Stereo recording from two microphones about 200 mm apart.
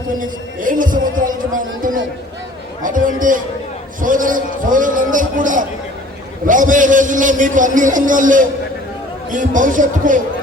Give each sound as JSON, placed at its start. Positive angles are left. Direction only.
{"t": 0.2, "sound": "a man's voice", "side_deg": -40}